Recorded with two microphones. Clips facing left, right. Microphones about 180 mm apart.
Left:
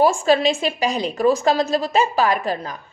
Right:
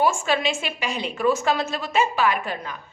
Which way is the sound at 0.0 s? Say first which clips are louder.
Left 6 dB; 35° left (ahead or behind).